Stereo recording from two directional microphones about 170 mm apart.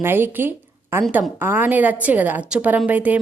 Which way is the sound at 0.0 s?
15° right (ahead or behind).